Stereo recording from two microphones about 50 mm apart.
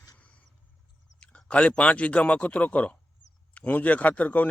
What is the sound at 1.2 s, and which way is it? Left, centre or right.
Speech, left.